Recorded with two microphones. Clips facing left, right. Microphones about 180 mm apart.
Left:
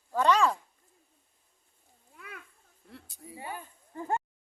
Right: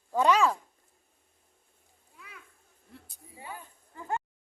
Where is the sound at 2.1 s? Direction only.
60° left (ahead or behind).